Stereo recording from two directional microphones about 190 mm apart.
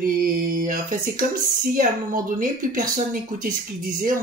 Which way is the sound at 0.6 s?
45° right (ahead or behind).